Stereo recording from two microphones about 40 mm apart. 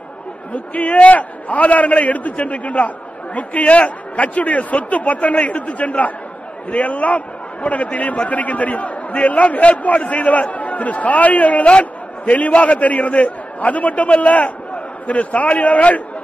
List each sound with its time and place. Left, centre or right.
0.5 s a man's voice: left